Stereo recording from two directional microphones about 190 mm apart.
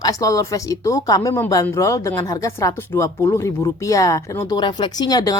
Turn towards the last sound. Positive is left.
turn(degrees=20)  # may be behind; listen again after turning